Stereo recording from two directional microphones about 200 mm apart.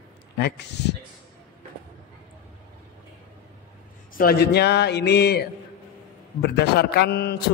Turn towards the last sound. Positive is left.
turn(degrees=55)  # may be behind; listen again after turning